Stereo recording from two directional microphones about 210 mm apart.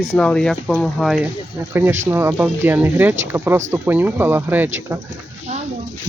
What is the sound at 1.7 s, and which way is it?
Speech, 10° right (ahead or behind).